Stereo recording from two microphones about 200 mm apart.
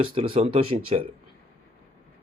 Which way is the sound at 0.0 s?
25° right (ahead or behind).